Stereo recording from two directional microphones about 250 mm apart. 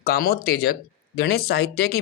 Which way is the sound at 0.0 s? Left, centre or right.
Left.